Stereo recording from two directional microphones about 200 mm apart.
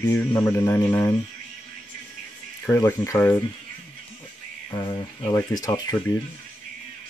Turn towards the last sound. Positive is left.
turn(degrees=20)  # may be behind; listen again after turning